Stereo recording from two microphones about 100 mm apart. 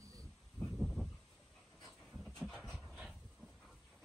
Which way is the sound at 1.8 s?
Centre (ahead or behind).